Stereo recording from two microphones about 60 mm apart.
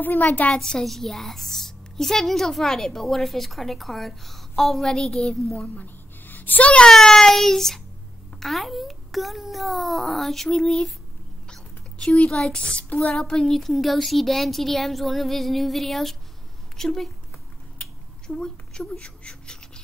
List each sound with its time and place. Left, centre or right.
0.0 s a child's voice: left
0.6 s a woman's voice: centre
5.8 s a sound: left
6.9 s child singing: centre
8.4 s a woman's voice: centre
17.7 s a sound: centre